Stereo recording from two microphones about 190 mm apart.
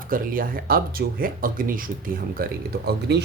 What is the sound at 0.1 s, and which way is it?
Speech, 50° right (ahead or behind).